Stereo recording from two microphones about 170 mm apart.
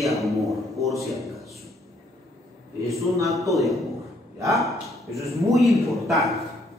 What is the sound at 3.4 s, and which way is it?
A man's voice, centre (ahead or behind).